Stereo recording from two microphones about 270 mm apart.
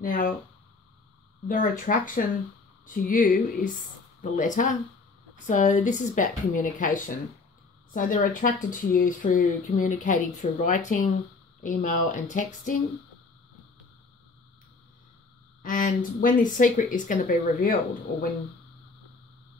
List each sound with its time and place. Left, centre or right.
0.0 s speech: left
1.5 s speech: left
15.6 s speech: left